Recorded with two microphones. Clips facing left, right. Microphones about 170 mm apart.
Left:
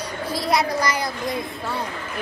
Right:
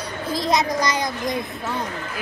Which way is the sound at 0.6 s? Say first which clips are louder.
Right 1 dB; 30° left (ahead or behind).